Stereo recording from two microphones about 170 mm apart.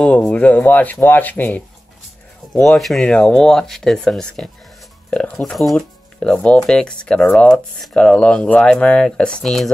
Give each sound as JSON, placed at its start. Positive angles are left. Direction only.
{"t": 0.0, "sound": "speech", "side_deg": 5}